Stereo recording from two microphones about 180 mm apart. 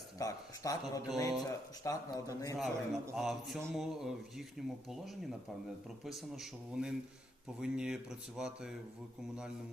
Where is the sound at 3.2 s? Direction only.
Centre (ahead or behind).